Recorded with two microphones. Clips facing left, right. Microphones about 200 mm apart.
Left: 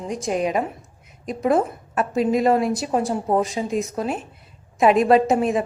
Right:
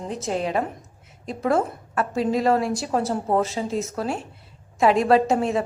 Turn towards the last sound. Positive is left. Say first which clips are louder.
# left 2 dB
turn(degrees=20)  # may be behind; listen again after turning